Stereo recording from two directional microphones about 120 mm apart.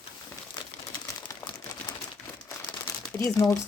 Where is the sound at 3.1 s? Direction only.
25° left (ahead or behind).